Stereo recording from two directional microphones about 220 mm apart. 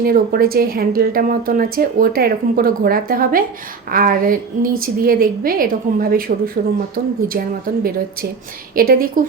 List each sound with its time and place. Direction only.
0.0 s speech: 45° right (ahead or behind)
8.7 s speech: 40° right (ahead or behind)